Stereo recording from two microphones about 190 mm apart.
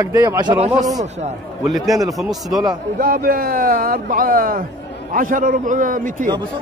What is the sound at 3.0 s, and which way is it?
Speech, 50° right (ahead or behind).